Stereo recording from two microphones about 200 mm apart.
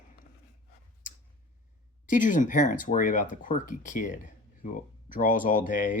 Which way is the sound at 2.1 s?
40° left (ahead or behind).